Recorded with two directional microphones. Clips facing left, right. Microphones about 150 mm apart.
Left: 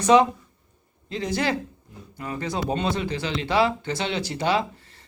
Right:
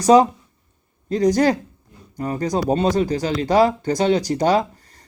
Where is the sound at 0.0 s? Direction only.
40° right (ahead or behind).